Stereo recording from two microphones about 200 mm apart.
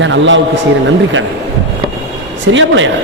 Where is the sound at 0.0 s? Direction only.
70° right (ahead or behind).